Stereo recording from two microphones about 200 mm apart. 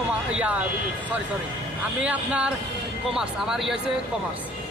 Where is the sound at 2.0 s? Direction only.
5° right (ahead or behind).